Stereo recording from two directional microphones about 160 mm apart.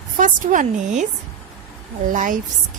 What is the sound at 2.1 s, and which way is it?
Speech, 55° right (ahead or behind).